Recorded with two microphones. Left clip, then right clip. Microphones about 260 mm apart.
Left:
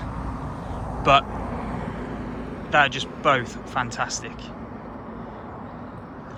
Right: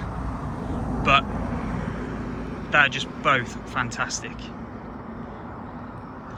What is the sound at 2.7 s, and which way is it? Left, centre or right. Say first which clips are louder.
Speech: even; centre.